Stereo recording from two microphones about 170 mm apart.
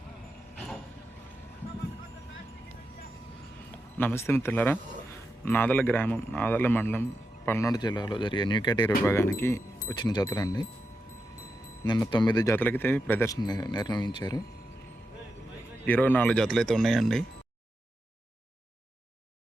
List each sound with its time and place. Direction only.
3.9 s speech: 15° left (ahead or behind)
11.9 s speech: 25° left (ahead or behind)
12.5 s speech: 10° left (ahead or behind)
15.9 s speech: 10° left (ahead or behind)